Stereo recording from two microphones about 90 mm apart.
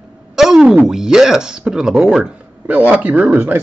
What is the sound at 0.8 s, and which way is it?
Speech, 5° right (ahead or behind).